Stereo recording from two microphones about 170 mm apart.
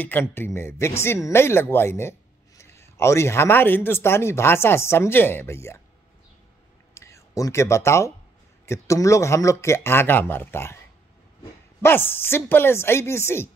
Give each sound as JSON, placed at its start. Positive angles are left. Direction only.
{"t": 0.0, "sound": "speech", "side_deg": 10}
{"t": 6.9, "sound": "a sound", "side_deg": 15}
{"t": 8.6, "sound": "speech", "side_deg": 15}
{"t": 11.8, "sound": "speech", "side_deg": 10}